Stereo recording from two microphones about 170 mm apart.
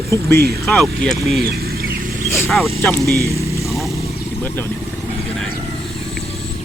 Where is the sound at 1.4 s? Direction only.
65° right (ahead or behind).